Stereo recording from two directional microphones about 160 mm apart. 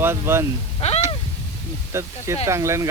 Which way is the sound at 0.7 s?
40° left (ahead or behind).